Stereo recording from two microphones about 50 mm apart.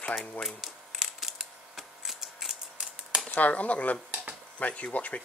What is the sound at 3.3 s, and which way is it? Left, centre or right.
Speech, left.